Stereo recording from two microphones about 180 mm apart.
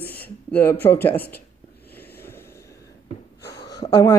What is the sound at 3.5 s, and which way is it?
Gasp, 20° left (ahead or behind).